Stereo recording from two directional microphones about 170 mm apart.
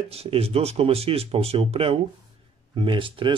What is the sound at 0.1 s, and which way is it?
Speech, 35° right (ahead or behind).